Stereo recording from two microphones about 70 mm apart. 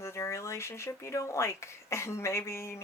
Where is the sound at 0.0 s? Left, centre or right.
Left.